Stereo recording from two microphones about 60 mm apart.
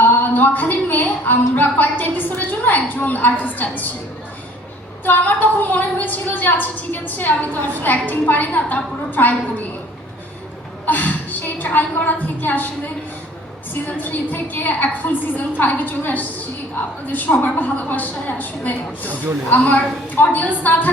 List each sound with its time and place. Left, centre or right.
0.0 s a woman's voice: left
5.0 s a woman's voice: left
10.8 s a woman's voice: left
14.0 s a woman's voice: left